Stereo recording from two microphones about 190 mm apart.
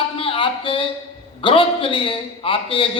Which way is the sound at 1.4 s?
30° left (ahead or behind).